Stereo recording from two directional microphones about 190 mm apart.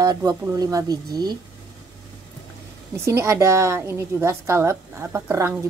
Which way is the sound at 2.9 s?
15° right (ahead or behind).